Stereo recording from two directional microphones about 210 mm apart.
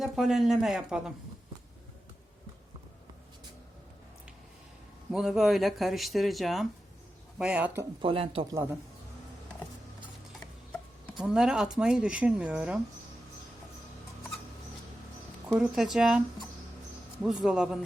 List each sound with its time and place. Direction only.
0.0 s speech: centre (ahead or behind)
5.1 s speech: centre (ahead or behind)
8.0 s speech: 25° right (ahead or behind)
11.2 s speech: 5° right (ahead or behind)
15.4 s speech: centre (ahead or behind)